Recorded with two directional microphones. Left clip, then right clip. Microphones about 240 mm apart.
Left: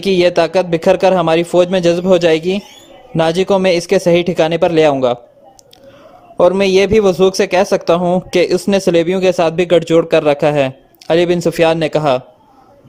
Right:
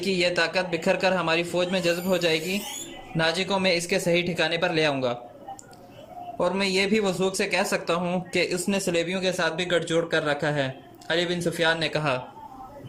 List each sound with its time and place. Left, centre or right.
0.0 s a man's voice: left
6.3 s a man's voice: left